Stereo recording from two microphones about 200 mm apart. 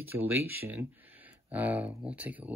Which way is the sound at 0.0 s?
10° right (ahead or behind).